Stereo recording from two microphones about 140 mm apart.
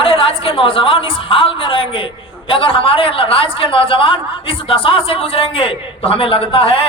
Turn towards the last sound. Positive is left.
turn(degrees=40)  # may be behind; listen again after turning